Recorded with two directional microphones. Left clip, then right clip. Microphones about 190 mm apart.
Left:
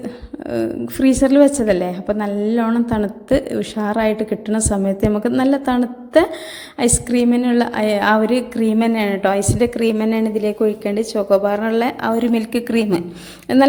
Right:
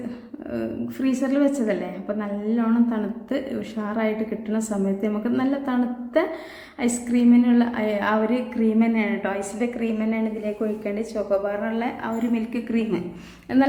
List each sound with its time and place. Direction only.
0.5 s a woman's voice: 45° left (ahead or behind)